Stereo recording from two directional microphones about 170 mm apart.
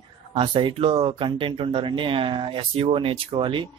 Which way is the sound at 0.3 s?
30° right (ahead or behind).